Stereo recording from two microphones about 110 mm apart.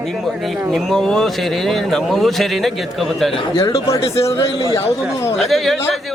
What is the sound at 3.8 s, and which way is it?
Speech, 30° left (ahead or behind).